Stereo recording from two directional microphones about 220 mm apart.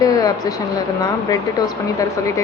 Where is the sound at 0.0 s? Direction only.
15° left (ahead or behind).